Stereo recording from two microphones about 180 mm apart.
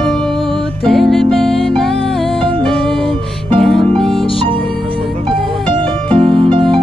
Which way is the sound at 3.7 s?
30° right (ahead or behind).